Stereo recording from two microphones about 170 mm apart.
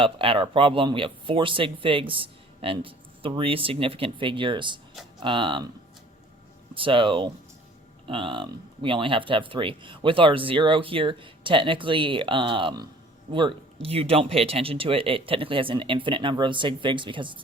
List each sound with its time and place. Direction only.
0.0 s speech: 30° right (ahead or behind)
6.7 s speech: 30° right (ahead or behind)